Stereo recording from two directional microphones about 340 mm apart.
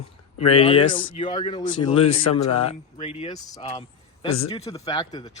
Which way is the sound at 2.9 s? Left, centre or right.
Centre.